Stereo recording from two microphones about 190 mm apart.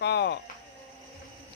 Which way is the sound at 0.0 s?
60° left (ahead or behind).